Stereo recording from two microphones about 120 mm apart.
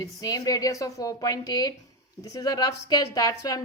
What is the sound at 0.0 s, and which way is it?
Speech, 30° left (ahead or behind).